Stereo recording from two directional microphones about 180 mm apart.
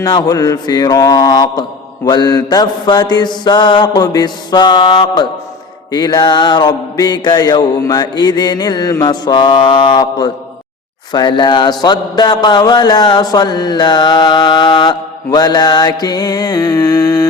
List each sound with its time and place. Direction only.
0.0 s speech: 20° left (ahead or behind)